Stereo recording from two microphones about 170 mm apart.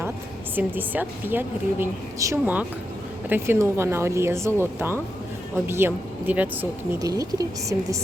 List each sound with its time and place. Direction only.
0.5 s a woman's voice: 10° right (ahead or behind)
7.0 s a woman's voice: 20° right (ahead or behind)